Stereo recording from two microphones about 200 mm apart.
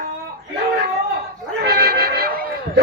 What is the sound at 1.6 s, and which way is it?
Music, 55° right (ahead or behind).